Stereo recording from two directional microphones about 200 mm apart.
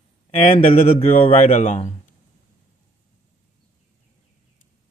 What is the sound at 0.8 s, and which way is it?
Speech, 30° left (ahead or behind).